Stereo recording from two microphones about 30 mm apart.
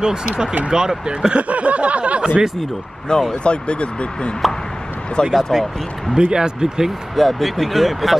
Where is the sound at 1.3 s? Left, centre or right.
Right.